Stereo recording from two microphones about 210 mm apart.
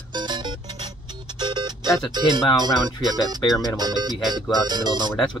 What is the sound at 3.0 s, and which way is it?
Speech, 20° right (ahead or behind).